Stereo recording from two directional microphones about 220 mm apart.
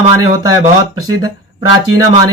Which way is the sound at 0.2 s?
15° right (ahead or behind).